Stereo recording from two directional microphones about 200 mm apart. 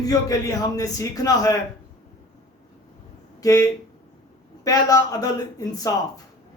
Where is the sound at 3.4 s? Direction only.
15° left (ahead or behind).